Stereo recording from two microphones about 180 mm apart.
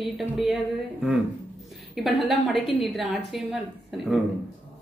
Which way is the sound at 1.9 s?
Centre (ahead or behind).